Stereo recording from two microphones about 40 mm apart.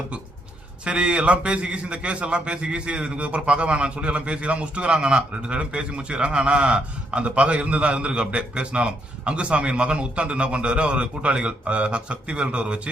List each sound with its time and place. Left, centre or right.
0.9 s a man's voice: right